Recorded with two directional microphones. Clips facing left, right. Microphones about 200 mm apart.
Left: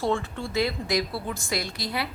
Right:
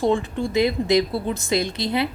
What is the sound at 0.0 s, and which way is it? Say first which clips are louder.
Speech: right 6 dB; 15° right (ahead or behind).